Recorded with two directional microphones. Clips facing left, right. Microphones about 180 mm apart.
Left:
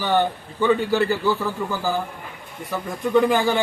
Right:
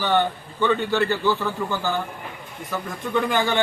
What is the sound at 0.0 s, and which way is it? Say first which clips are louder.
A man's voice: left 1 dB; 10° left (ahead or behind).